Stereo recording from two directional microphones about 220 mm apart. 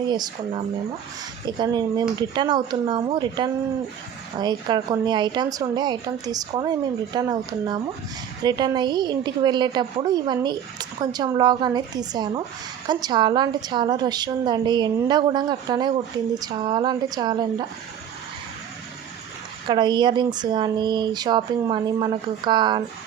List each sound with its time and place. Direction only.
0.1 s speech: 20° right (ahead or behind)
19.6 s speech: 20° right (ahead or behind)